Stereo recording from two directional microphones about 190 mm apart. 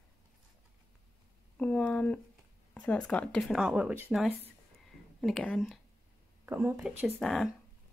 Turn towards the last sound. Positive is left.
turn(degrees=5)  # may be behind; listen again after turning